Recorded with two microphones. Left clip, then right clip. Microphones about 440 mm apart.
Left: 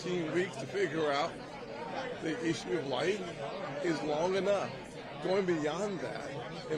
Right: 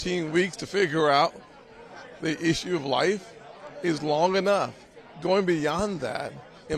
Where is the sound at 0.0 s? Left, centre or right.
Right.